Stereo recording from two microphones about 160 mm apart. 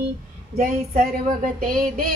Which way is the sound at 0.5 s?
55° right (ahead or behind).